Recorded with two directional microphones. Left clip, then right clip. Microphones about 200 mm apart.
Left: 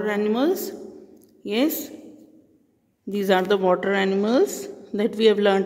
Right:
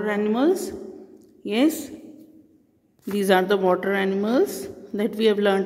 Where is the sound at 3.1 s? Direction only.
Centre (ahead or behind).